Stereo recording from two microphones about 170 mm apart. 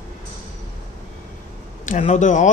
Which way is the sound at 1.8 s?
45° left (ahead or behind).